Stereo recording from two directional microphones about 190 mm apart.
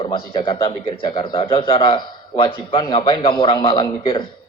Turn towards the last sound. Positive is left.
turn(degrees=25)  # may be behind; listen again after turning